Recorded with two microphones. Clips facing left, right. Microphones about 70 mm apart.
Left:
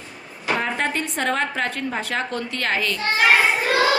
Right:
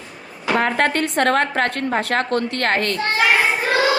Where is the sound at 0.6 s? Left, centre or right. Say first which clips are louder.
Right 5 dB; right.